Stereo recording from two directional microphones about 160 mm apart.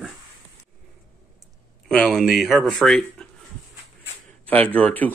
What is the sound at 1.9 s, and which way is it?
Speech, centre (ahead or behind).